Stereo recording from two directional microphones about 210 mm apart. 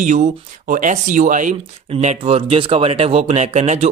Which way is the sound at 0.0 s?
35° right (ahead or behind).